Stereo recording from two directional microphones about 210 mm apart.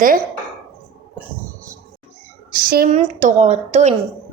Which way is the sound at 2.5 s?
45° right (ahead or behind).